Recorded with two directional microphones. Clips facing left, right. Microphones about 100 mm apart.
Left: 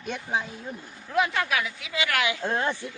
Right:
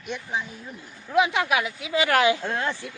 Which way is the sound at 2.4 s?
20° left (ahead or behind).